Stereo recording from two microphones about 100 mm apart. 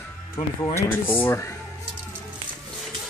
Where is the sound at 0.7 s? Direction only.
20° left (ahead or behind).